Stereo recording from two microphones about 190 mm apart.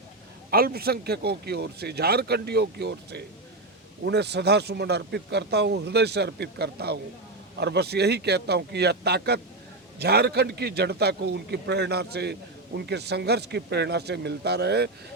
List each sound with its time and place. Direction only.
0.5 s a man's voice: 55° right (ahead or behind)